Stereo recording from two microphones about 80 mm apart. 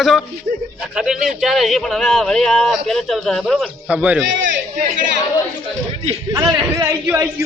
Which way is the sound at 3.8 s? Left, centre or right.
Centre.